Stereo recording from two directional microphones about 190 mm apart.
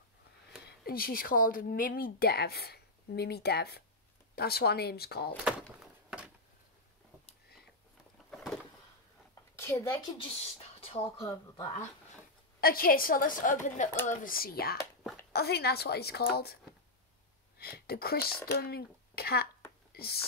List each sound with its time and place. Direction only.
0.7 s speech: 50° left (ahead or behind)
5.4 s thunk: 5° right (ahead or behind)
8.3 s a sound: centre (ahead or behind)
9.6 s speech: 15° left (ahead or behind)
11.1 s speech: 15° left (ahead or behind)
12.5 s a woman's voice: 50° left (ahead or behind)
17.6 s speech: 55° left (ahead or behind)
19.9 s whispering: 55° left (ahead or behind)